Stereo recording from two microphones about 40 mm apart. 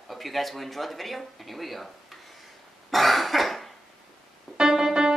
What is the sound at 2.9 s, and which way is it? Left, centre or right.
Cough, centre.